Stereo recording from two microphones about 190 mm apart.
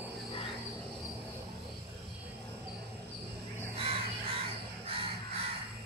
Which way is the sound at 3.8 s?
30° right (ahead or behind).